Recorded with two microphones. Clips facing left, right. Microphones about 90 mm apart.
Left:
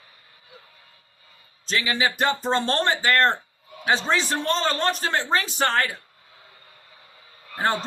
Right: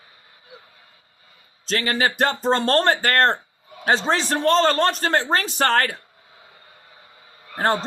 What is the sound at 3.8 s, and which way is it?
A man's voice, 40° right (ahead or behind).